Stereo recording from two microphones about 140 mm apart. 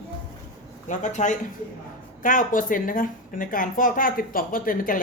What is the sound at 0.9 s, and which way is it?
Speech, 60° left (ahead or behind).